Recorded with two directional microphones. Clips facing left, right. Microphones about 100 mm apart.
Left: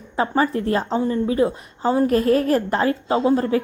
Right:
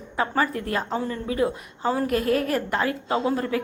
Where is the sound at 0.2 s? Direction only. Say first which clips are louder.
Left 4 dB; 25° left (ahead or behind).